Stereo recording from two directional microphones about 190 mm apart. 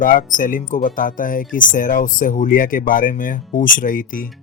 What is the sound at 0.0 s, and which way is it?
Speech, 45° left (ahead or behind).